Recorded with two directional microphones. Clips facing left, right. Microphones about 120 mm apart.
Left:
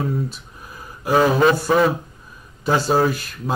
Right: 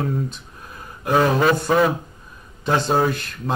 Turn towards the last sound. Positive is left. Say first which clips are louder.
# left 1 dB
turn(degrees=5)  # may be behind; listen again after turning